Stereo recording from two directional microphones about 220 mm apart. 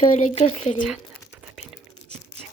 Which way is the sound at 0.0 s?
25° left (ahead or behind).